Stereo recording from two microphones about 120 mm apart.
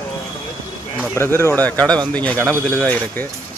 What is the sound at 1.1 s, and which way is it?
Speech, 20° left (ahead or behind).